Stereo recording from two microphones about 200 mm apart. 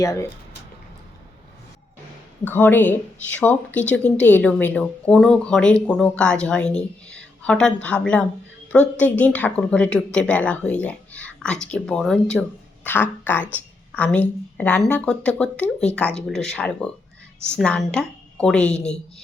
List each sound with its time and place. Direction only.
0.0 s a woman's voice: 15° left (ahead or behind)
2.4 s a woman's voice: 10° left (ahead or behind)